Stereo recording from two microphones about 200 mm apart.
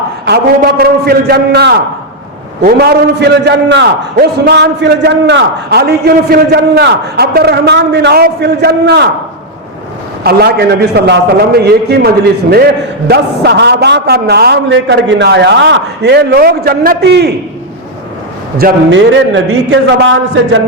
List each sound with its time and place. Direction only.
0.3 s a man's voice: 50° right (ahead or behind)
10.2 s a man's voice: 55° right (ahead or behind)
18.9 s a man's voice: 65° right (ahead or behind)